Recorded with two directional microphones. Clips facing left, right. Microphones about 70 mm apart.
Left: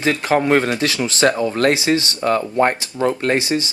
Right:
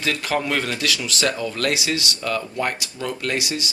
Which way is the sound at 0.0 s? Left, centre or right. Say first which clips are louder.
Left 6 dB; left.